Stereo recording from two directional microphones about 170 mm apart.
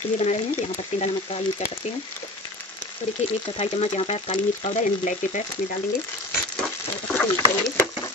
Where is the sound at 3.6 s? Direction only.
35° left (ahead or behind).